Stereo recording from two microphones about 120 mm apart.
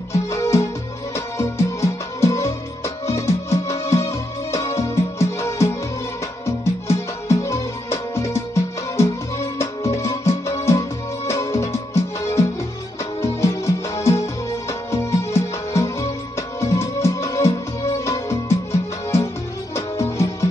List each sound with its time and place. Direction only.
0.1 s music: 25° left (ahead or behind)